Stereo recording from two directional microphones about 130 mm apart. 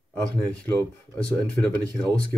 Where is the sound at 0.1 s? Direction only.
10° left (ahead or behind).